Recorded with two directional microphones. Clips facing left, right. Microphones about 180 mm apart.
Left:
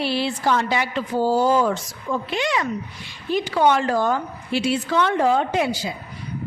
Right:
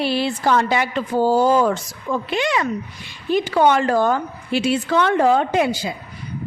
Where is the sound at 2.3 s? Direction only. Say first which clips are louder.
Right 3 dB; 60° right (ahead or behind).